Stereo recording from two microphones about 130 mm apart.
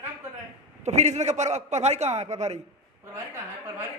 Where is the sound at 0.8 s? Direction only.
60° right (ahead or behind).